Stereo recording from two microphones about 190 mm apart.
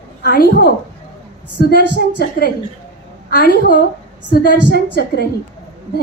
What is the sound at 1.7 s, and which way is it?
A woman's voice, 55° left (ahead or behind).